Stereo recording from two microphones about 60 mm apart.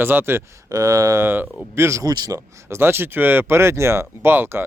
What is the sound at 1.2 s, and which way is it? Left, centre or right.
Speech, right.